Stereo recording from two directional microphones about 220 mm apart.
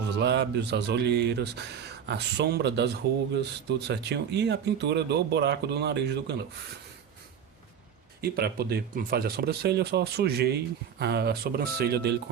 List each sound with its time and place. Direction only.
0.1 s speech: 50° right (ahead or behind)
8.2 s speech: 45° right (ahead or behind)